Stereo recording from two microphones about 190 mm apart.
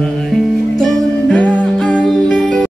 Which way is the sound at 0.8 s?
Centre (ahead or behind).